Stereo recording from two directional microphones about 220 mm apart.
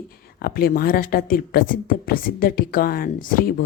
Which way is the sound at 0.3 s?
45° left (ahead or behind).